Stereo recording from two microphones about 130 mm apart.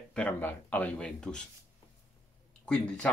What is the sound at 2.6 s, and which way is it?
Speech, 10° left (ahead or behind).